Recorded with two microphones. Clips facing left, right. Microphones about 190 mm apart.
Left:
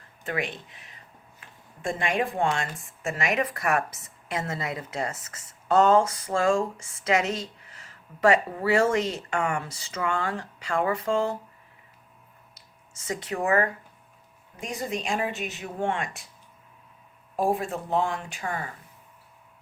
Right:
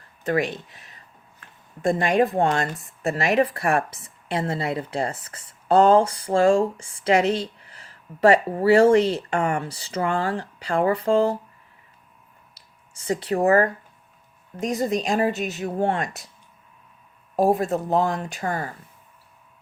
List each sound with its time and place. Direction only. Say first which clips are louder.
0.3 s speech: right 7 dB; 40° right (ahead or behind)
12.5 s a sound: even; 30° right (ahead or behind)
14.6 s speech: right 8 dB; 40° right (ahead or behind)
17.3 s speech: right 6 dB; 40° right (ahead or behind)